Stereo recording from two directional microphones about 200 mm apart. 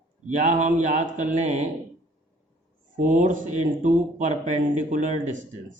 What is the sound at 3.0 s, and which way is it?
Speech, 40° right (ahead or behind).